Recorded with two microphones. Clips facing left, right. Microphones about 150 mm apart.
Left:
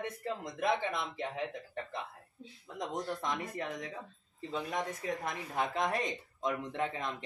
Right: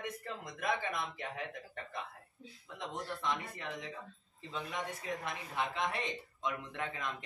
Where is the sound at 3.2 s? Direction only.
40° left (ahead or behind).